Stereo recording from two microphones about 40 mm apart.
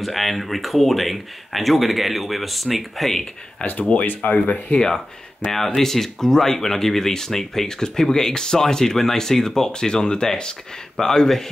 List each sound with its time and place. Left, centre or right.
0.0 s speech: centre
3.6 s speech: left
4.7 s speech: centre